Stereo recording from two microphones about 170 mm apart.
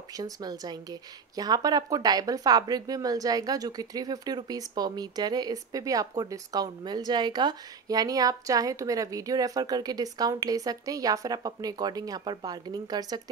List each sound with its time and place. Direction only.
0.1 s a woman's voice: 25° right (ahead or behind)